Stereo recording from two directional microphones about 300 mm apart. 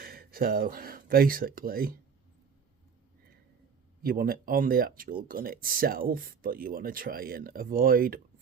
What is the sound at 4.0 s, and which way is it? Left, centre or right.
Speech, right.